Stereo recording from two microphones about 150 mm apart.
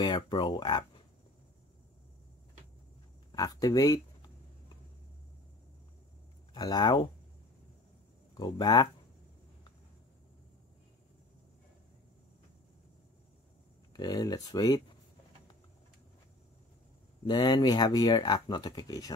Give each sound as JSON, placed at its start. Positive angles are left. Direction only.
{"t": 0.0, "sound": "speech", "side_deg": 30}
{"t": 3.3, "sound": "speech", "side_deg": 25}
{"t": 6.5, "sound": "speech", "side_deg": 30}
{"t": 8.4, "sound": "speech", "side_deg": 30}
{"t": 13.9, "sound": "speech", "side_deg": 25}
{"t": 17.2, "sound": "speech", "side_deg": 30}